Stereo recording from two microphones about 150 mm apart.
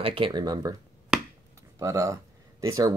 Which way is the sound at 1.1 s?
5° right (ahead or behind).